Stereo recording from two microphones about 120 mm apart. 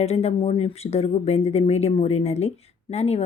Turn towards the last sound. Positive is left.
turn(degrees=60)  # may be behind; listen again after turning